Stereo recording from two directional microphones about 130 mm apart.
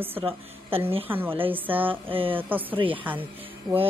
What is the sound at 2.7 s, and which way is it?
Speech, 40° right (ahead or behind).